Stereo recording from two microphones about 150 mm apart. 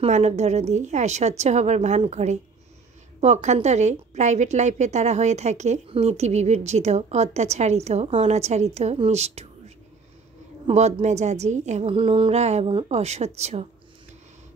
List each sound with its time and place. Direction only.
0.0 s a woman's voice: 50° right (ahead or behind)
10.7 s a woman's voice: 50° right (ahead or behind)
11.9 s mantra: 35° right (ahead or behind)
12.7 s a woman's voice: 40° right (ahead or behind)